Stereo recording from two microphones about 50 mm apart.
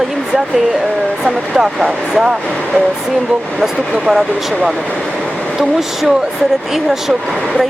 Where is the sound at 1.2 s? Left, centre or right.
Centre.